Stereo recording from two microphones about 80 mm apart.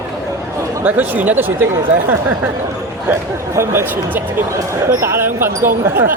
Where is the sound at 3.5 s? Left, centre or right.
Right.